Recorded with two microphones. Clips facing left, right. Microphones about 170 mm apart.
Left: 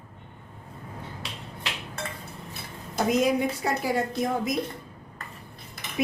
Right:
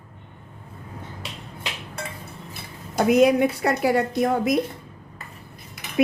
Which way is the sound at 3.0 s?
65° right (ahead or behind).